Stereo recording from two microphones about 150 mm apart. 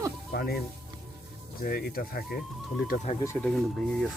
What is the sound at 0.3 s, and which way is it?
Speech, 90° left.